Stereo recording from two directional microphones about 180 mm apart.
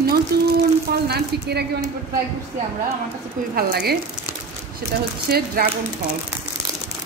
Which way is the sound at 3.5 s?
60° right (ahead or behind).